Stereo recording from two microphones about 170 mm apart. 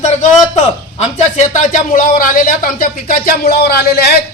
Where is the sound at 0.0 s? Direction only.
45° left (ahead or behind).